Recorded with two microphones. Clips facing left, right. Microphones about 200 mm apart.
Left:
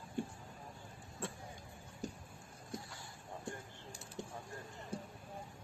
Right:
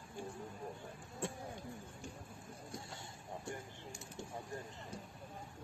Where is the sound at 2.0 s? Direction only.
40° left (ahead or behind).